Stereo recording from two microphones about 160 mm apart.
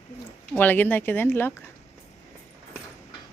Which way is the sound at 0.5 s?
10° left (ahead or behind).